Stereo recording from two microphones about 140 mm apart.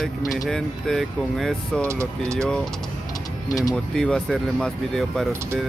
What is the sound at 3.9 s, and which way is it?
Speech, 5° left (ahead or behind).